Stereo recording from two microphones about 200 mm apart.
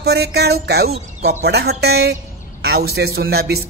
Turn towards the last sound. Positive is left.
turn(degrees=-55)  # may be behind; listen again after turning